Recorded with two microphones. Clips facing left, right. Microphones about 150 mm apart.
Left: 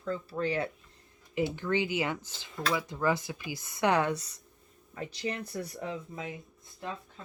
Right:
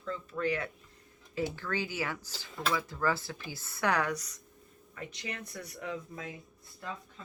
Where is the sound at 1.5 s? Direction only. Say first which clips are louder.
Left 5 dB; 20° left (ahead or behind).